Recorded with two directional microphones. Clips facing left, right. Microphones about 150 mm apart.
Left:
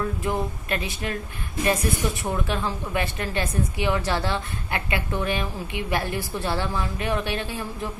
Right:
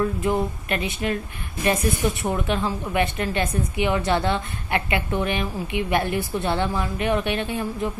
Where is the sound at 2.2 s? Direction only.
15° right (ahead or behind).